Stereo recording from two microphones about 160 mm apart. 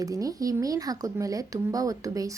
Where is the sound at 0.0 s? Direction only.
20° right (ahead or behind).